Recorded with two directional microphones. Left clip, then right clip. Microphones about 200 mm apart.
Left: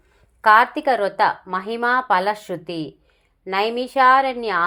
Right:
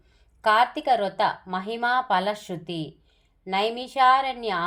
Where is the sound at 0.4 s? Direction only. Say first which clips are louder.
Left 6 dB; 10° left (ahead or behind).